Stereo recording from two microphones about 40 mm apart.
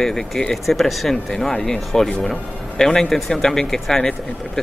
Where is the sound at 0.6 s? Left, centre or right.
Centre.